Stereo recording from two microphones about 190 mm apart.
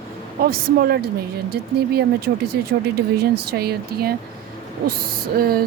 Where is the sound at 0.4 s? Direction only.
55° right (ahead or behind).